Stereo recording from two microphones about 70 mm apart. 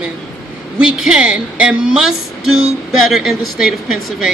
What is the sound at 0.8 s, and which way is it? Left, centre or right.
A man's voice, centre.